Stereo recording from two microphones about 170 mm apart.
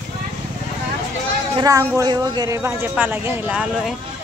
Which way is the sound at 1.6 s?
20° right (ahead or behind).